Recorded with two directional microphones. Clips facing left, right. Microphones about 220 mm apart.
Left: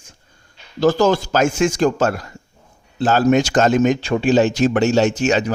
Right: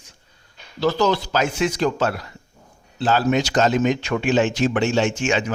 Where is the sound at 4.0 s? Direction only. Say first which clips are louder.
Left 4 dB; 30° left (ahead or behind).